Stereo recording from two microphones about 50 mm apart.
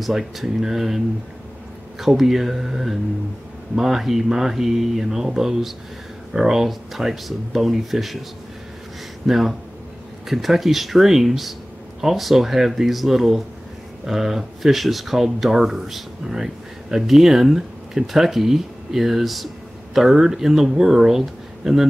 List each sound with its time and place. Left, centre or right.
0.0 s speech: centre
9.2 s speech: centre